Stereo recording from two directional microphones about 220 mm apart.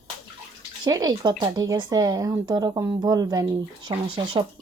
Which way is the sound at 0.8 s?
20° right (ahead or behind).